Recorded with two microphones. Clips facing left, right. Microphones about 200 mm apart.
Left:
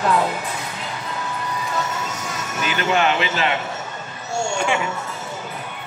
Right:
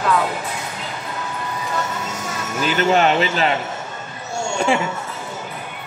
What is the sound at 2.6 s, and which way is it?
Speech, 35° right (ahead or behind).